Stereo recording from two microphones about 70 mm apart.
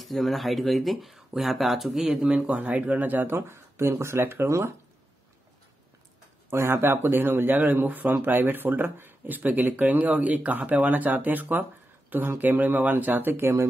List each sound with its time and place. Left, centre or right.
0.0 s speech: centre
2.2 s speech: centre
3.3 s speech: right
4.5 s speech: right
6.5 s speech: right